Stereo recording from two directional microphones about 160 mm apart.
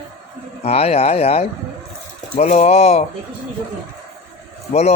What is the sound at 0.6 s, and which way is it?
Speech, 40° left (ahead or behind).